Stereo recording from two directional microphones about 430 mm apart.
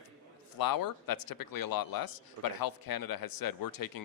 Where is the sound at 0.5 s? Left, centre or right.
Left.